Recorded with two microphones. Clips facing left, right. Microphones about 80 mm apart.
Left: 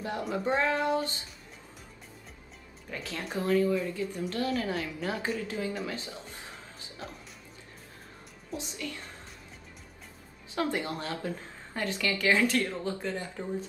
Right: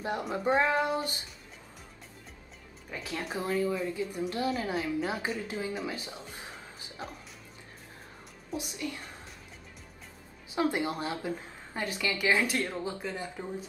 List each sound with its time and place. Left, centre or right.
0.0 s a woman's voice: right
2.9 s a woman's voice: centre
8.7 s a woman's voice: right
10.5 s a woman's voice: centre